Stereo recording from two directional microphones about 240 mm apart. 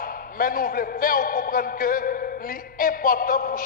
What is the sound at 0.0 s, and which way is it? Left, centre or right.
A man's voice, left.